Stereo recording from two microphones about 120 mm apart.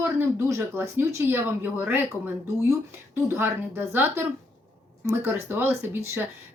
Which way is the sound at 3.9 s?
15° right (ahead or behind).